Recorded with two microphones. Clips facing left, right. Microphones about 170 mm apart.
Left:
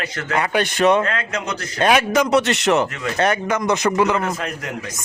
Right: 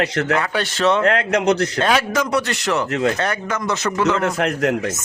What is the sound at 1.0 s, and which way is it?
Speech, 70° right (ahead or behind).